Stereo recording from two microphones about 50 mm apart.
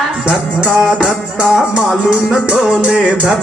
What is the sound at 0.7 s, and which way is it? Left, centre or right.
Music, centre.